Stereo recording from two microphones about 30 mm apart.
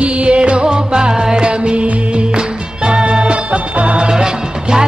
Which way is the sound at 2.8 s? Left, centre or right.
Right.